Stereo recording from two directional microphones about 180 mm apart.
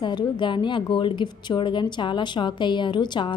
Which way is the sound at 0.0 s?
25° left (ahead or behind).